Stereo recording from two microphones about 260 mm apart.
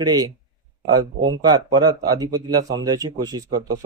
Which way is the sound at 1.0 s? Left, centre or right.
Right.